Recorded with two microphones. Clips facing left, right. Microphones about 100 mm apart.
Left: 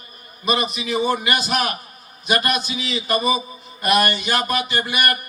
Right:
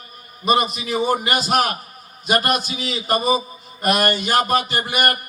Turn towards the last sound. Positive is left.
turn(degrees=-45)  # may be behind; listen again after turning